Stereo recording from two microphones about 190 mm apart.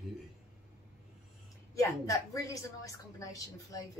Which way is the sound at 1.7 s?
15° left (ahead or behind).